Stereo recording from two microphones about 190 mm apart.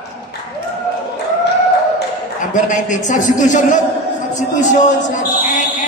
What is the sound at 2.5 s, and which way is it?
A man's voice, 40° left (ahead or behind).